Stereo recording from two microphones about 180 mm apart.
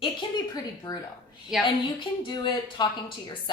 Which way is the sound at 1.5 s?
Centre (ahead or behind).